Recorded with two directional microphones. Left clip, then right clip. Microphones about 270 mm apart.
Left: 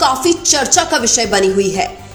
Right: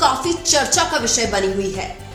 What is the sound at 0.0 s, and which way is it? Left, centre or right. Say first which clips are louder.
A woman's voice: left 4 dB; left.